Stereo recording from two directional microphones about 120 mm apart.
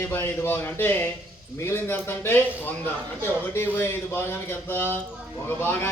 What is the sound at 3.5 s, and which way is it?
Speech, 20° left (ahead or behind).